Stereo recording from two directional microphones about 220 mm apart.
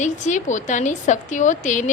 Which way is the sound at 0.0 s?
35° left (ahead or behind).